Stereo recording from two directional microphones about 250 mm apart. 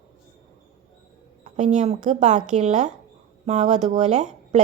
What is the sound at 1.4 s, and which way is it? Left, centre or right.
A woman's voice, right.